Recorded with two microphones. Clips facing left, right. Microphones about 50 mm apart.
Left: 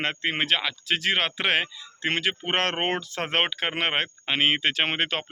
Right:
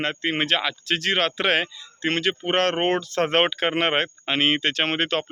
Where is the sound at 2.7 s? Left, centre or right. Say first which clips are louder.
Right 5 dB; centre.